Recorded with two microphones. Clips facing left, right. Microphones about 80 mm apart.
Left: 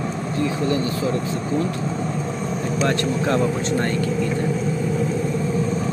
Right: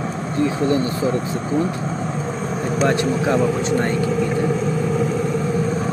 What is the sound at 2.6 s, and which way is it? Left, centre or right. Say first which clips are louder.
Vehicle: right 3 dB; right.